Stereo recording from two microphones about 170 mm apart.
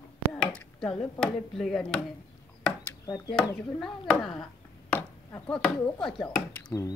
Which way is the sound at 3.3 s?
5° left (ahead or behind).